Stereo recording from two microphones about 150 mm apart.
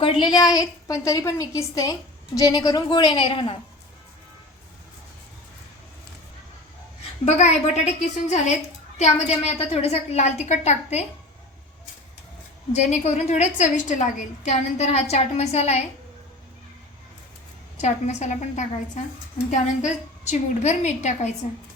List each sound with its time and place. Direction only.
0.0 s a woman's voice: 35° left (ahead or behind)
7.3 s a woman's voice: 50° left (ahead or behind)
12.7 s a woman's voice: 50° left (ahead or behind)
17.7 s a woman's voice: 50° left (ahead or behind)